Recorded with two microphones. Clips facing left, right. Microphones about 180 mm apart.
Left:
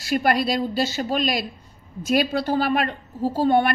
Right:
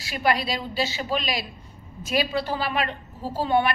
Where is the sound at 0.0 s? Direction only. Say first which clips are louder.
Left 4 dB; 50° left (ahead or behind).